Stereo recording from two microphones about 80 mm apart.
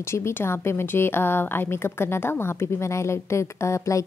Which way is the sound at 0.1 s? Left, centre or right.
Left.